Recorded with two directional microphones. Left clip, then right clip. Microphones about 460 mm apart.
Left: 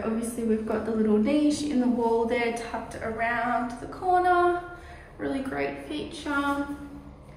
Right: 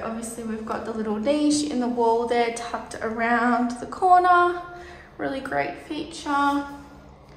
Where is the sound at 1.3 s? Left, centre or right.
Centre.